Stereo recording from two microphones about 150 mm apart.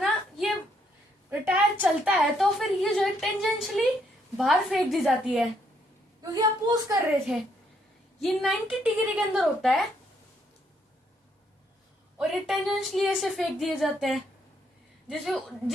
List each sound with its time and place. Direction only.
0.0 s a sound: centre (ahead or behind)
1.3 s a woman's voice: 10° right (ahead or behind)
6.2 s a woman's voice: 25° right (ahead or behind)
8.2 s a woman's voice: centre (ahead or behind)
12.1 s a woman's voice: centre (ahead or behind)